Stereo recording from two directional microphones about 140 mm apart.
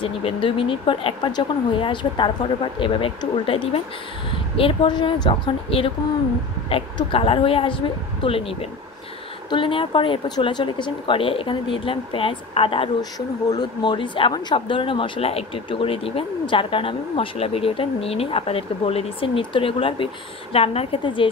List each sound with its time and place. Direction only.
0.0 s a woman's voice: 40° left (ahead or behind)